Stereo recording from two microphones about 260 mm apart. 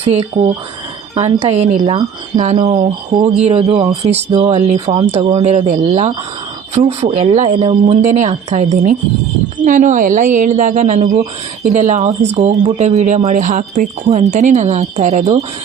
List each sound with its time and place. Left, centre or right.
0.0 s speech: right